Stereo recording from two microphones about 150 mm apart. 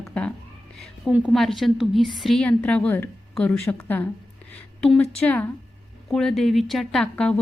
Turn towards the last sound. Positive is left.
turn(degrees=10)  # may be behind; listen again after turning